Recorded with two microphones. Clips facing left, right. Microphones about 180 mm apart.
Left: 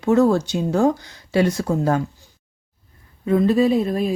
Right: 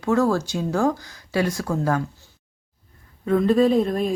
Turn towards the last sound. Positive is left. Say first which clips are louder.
# even
turn(degrees=5)  # may be behind; listen again after turning